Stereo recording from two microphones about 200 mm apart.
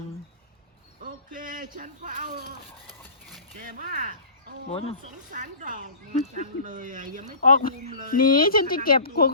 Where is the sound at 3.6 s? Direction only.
40° right (ahead or behind).